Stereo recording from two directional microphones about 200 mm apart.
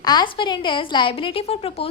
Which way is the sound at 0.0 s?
20° left (ahead or behind).